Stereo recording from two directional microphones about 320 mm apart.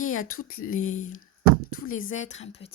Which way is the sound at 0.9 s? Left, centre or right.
Left.